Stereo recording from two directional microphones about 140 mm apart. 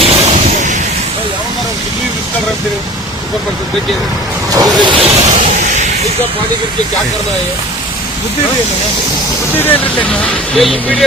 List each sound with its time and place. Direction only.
0.0 s vehicle: 45° right (ahead or behind)
4.5 s vehicle: 30° right (ahead or behind)
10.2 s speech: centre (ahead or behind)